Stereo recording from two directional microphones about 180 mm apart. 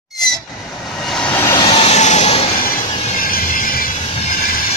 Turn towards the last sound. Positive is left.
turn(degrees=55)  # may be behind; listen again after turning